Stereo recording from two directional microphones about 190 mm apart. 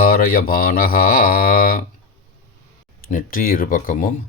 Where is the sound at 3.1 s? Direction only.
45° left (ahead or behind).